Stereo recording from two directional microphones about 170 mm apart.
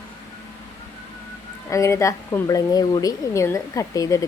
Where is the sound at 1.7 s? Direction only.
15° left (ahead or behind).